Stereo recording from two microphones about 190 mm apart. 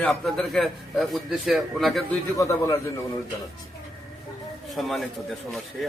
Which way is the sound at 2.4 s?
15° left (ahead or behind).